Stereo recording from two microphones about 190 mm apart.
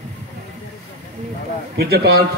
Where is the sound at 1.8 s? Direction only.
55° right (ahead or behind).